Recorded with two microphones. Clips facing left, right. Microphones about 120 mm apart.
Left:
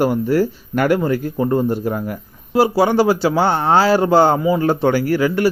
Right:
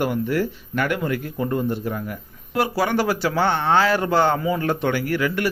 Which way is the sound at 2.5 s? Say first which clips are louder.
Left 7 dB; 30° left (ahead or behind).